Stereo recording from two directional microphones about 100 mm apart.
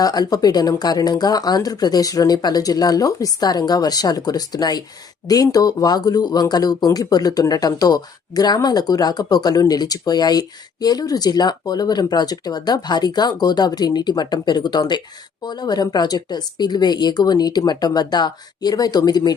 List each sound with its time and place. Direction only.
0.0 s speech: 40° left (ahead or behind)